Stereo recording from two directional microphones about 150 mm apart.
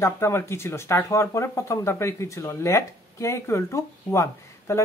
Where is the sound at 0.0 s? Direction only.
15° left (ahead or behind).